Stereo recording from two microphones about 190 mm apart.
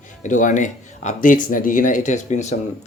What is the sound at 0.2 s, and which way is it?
Speech, 40° left (ahead or behind).